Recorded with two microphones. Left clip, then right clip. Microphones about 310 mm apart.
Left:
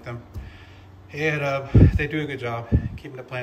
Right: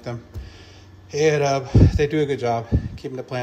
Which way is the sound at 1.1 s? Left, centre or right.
Centre.